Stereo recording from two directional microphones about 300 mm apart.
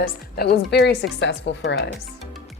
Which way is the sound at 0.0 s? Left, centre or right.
Left.